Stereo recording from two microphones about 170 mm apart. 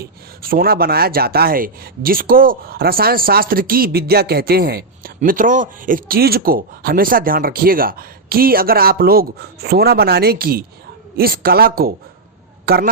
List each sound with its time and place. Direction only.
0.0 s speech: 60° right (ahead or behind)